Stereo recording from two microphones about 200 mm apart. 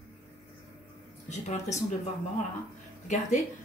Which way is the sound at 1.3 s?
35° left (ahead or behind).